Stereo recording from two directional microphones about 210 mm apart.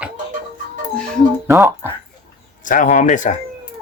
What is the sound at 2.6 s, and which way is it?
Speech, 40° left (ahead or behind).